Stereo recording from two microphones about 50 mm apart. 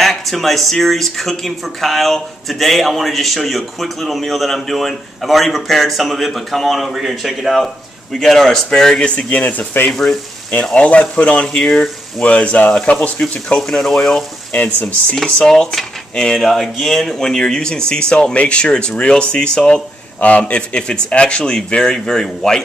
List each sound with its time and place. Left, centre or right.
0.0 s speech: centre
8.2 s cutlery: centre
9.1 s speech: left
9.8 s cutlery: centre
10.5 s speech: left
11.5 s cutlery: centre
12.3 s speech: left
13.6 s cutlery: centre
14.5 s speech: left
15.2 s cutlery: centre
18.1 s speech: left